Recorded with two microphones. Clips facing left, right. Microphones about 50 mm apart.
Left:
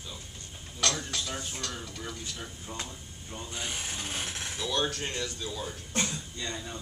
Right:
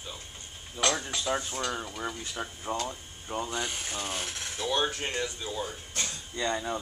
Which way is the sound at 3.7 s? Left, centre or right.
Centre.